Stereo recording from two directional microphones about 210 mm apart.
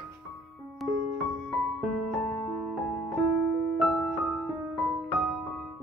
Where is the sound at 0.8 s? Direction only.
Centre (ahead or behind).